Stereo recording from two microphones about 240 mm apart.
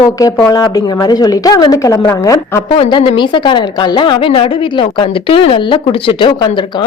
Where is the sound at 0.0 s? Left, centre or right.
Centre.